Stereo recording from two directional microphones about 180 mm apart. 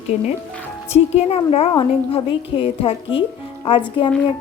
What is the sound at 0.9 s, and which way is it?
A woman's voice, 35° left (ahead or behind).